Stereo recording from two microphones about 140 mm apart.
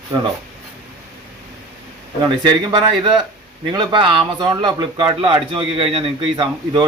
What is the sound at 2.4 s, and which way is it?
Speech, 30° right (ahead or behind).